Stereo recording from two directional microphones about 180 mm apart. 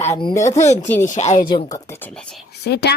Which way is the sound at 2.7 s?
65° left (ahead or behind).